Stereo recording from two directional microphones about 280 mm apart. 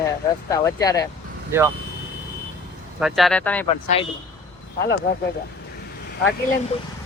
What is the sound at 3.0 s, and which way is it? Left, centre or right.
Speech, centre.